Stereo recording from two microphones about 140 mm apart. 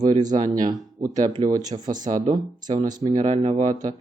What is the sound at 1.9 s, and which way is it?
Speech, 70° right (ahead or behind).